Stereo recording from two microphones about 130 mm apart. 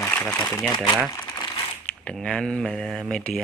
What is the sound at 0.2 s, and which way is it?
Speech, 5° left (ahead or behind).